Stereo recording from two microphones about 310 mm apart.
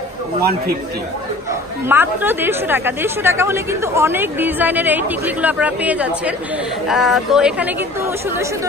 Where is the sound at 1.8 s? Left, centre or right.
Centre.